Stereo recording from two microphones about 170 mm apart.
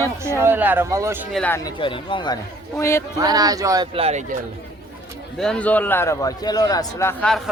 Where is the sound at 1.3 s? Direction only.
5° left (ahead or behind).